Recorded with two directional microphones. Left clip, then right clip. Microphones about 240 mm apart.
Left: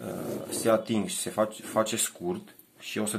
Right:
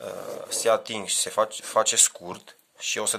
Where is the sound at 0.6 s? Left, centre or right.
Right.